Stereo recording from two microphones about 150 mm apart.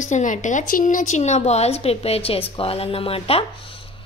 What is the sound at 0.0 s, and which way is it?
A woman's voice, 55° left (ahead or behind).